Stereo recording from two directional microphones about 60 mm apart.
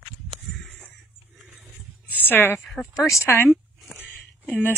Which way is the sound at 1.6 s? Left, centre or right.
Right.